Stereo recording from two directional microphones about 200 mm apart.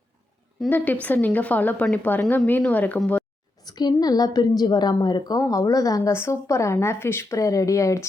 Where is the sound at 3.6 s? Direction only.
20° left (ahead or behind).